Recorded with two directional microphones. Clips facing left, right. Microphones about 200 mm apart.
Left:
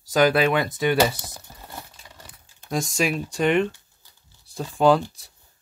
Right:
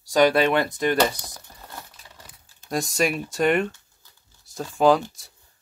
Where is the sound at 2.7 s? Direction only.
Centre (ahead or behind).